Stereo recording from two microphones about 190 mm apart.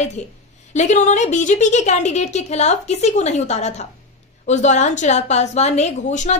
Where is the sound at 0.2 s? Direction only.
35° left (ahead or behind).